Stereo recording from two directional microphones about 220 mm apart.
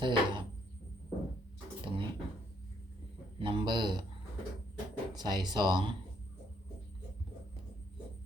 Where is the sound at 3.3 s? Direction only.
25° right (ahead or behind).